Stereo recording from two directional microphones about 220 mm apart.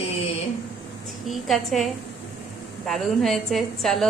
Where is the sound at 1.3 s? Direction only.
Centre (ahead or behind).